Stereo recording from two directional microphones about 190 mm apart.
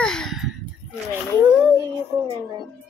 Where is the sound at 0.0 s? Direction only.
5° left (ahead or behind).